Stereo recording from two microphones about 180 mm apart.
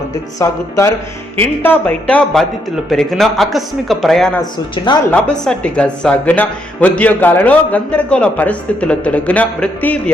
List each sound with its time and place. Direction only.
0.3 s a man's voice: 15° left (ahead or behind)
5.3 s a man's voice: 5° left (ahead or behind)